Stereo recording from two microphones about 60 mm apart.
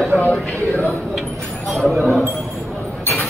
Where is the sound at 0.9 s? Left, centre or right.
Centre.